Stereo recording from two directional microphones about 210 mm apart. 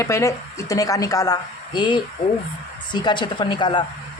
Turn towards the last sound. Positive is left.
turn(degrees=20)  # may be behind; listen again after turning